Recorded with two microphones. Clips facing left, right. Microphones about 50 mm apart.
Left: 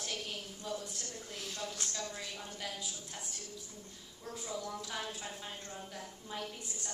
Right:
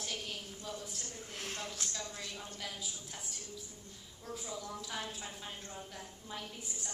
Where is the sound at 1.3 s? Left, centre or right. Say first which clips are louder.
Even; right.